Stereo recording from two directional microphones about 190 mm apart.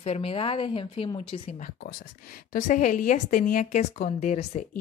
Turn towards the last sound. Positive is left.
turn(degrees=35)  # may be behind; listen again after turning